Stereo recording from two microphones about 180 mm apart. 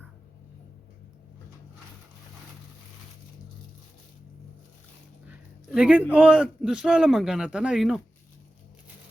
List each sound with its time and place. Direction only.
5.3 s a man's voice: 5° right (ahead or behind)